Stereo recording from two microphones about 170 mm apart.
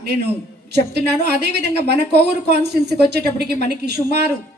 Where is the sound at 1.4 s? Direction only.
75° right (ahead or behind).